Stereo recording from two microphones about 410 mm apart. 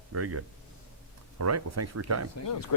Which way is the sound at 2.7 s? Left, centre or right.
Left.